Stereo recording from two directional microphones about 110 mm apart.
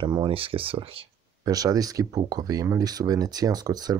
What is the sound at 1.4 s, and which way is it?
Speech, 35° right (ahead or behind).